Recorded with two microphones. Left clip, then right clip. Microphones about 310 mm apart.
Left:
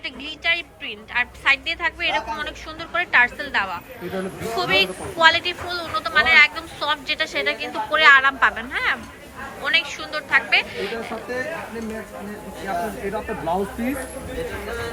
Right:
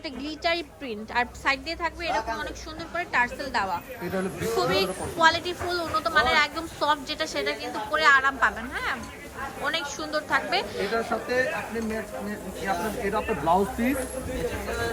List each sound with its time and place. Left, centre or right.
0.0 s a woman's voice: centre
12.6 s speech: centre